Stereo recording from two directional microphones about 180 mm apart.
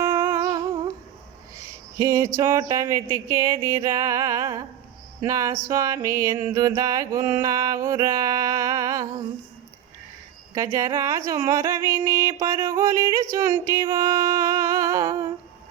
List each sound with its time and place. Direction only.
0.0 s humming: 15° right (ahead or behind)
1.5 s speech: 15° right (ahead or behind)
5.6 s music: 20° right (ahead or behind)
10.5 s speech: 20° right (ahead or behind)
13.3 s a sound: 20° right (ahead or behind)